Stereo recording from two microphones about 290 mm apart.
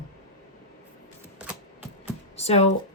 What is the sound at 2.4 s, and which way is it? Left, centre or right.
Speech, left.